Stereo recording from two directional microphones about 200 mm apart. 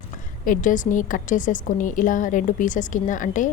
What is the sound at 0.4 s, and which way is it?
A woman's voice, 40° left (ahead or behind).